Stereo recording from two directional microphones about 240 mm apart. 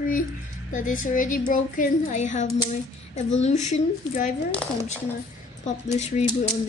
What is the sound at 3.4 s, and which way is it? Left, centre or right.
Speech, left.